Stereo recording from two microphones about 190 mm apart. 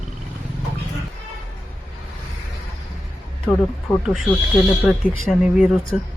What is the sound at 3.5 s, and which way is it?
Speech, 5° left (ahead or behind).